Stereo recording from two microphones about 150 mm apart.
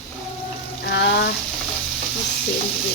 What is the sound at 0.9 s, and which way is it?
Frying, 90° left.